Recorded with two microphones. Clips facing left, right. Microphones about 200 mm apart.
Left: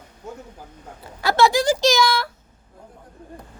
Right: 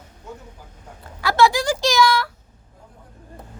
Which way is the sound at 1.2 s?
25° left (ahead or behind).